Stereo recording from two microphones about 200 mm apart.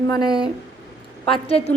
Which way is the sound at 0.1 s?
20° left (ahead or behind).